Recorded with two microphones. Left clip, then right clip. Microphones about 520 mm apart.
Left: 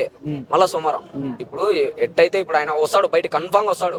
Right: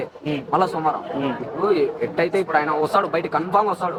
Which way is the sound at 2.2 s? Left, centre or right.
Left.